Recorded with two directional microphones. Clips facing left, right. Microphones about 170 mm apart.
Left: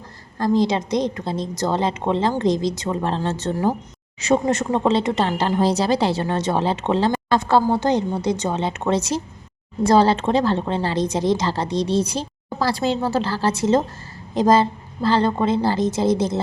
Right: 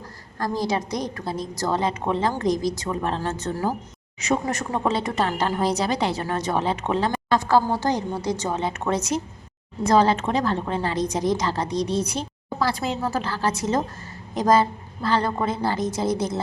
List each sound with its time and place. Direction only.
0.3 s speech: 25° left (ahead or behind)